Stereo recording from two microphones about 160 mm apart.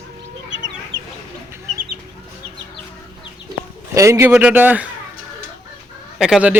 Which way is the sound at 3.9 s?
20° right (ahead or behind).